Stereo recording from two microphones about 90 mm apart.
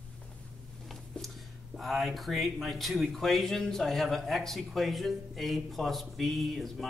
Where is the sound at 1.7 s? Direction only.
Centre (ahead or behind).